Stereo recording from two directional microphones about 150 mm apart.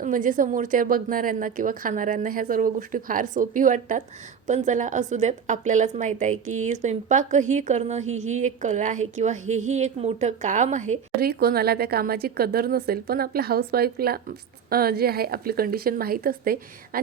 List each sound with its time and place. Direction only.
0.0 s a woman's voice: 60° right (ahead or behind)
11.2 s speech: 90° right